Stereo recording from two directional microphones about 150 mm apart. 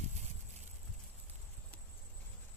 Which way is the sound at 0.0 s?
50° right (ahead or behind).